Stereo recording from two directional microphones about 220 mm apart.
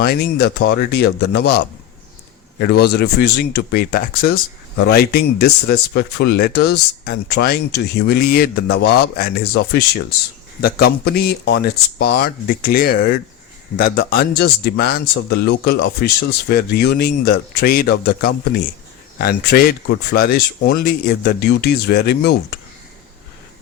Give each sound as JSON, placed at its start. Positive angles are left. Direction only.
{"t": 0.0, "sound": "speech", "side_deg": 45}